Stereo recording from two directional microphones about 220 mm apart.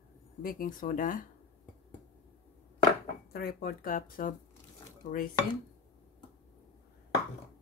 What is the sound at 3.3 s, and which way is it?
Speech, 45° left (ahead or behind).